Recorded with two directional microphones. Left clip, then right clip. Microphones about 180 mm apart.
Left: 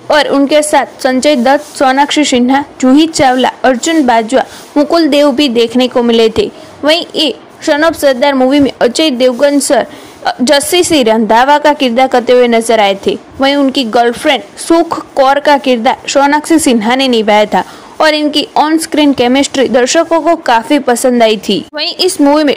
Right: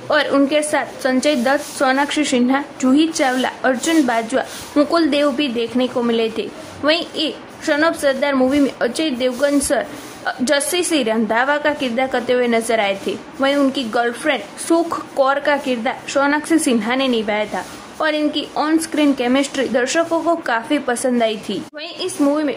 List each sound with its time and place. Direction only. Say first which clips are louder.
0.5 s speech: left 10 dB; 35° left (ahead or behind)